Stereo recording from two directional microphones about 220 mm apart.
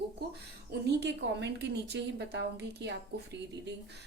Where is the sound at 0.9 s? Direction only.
50° right (ahead or behind).